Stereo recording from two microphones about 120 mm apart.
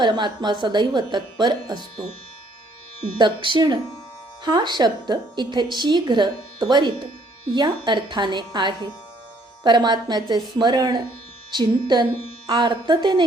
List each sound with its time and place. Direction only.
0.0 s speech: 40° right (ahead or behind)
3.2 s speech: 40° right (ahead or behind)